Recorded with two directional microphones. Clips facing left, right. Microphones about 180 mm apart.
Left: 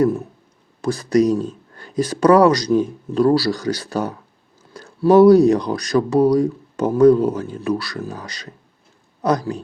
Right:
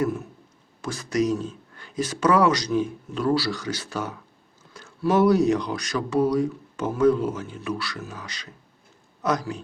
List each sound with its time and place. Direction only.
0.8 s speech: 35° left (ahead or behind)